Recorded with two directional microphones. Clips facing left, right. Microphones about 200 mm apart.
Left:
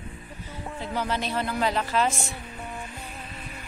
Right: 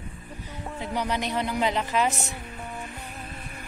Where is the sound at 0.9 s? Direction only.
15° right (ahead or behind).